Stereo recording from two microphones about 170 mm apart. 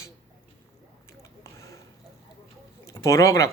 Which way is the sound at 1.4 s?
15° left (ahead or behind).